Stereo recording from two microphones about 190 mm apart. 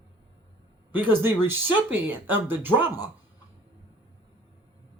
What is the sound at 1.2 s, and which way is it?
A man's voice, 10° right (ahead or behind).